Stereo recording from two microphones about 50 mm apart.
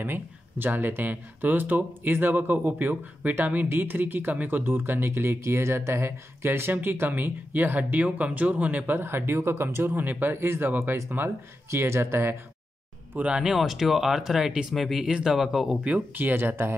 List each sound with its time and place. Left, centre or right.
0.0 s speech: right
9.9 s speech: right
10.4 s speech: right
11.7 s speech: right
13.2 s speech: centre
13.6 s speech: centre
15.0 s speech: centre
15.3 s speech: centre
16.2 s speech: right